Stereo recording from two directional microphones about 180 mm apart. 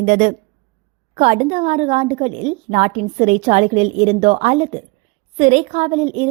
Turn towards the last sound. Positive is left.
turn(degrees=-35)  # may be behind; listen again after turning